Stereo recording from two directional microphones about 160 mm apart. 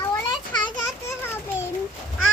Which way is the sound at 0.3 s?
30° left (ahead or behind).